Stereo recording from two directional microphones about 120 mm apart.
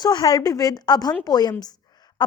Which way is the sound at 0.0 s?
35° left (ahead or behind).